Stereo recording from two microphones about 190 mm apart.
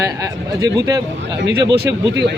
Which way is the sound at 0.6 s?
20° right (ahead or behind).